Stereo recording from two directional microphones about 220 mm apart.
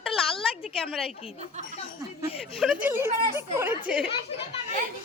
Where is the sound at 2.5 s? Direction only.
5° right (ahead or behind).